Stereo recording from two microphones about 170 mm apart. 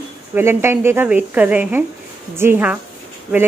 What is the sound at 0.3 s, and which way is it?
A woman's voice, 15° right (ahead or behind).